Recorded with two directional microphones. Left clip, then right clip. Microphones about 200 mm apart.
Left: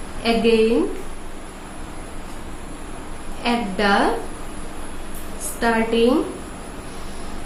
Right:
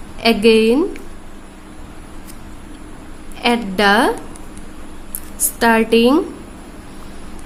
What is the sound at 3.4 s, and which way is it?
Speech, 65° right (ahead or behind).